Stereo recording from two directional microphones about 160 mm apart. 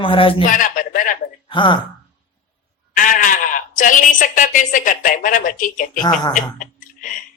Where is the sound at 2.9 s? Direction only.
55° left (ahead or behind).